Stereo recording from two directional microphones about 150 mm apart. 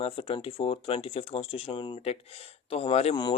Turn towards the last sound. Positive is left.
turn(degrees=25)  # may be behind; listen again after turning